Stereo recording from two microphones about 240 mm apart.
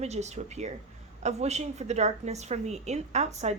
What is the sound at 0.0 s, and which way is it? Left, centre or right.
A woman's voice, right.